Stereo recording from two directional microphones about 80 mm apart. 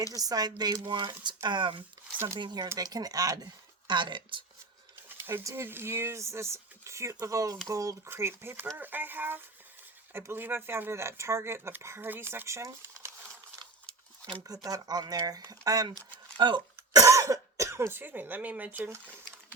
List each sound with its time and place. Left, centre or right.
0.1 s speech: right
2.4 s speech: right
2.7 s speech: right
3.8 s speech: right
5.0 s pigeon: right
5.4 s speech: right
5.6 s speech: right
8.1 s speech: right
14.4 s speech: right
16.9 s speech: right
19.0 s a sound: right